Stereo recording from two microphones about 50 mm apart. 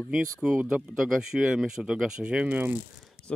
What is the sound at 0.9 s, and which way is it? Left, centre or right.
Speech, centre.